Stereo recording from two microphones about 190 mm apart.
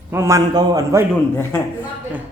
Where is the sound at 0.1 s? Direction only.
15° right (ahead or behind).